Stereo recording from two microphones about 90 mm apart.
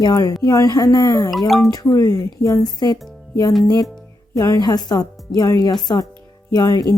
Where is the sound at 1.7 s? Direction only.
45° left (ahead or behind).